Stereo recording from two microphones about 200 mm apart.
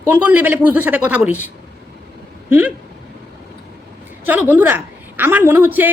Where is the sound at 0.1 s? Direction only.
10° right (ahead or behind).